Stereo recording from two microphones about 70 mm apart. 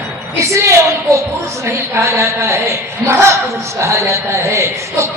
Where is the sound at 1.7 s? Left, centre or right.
Right.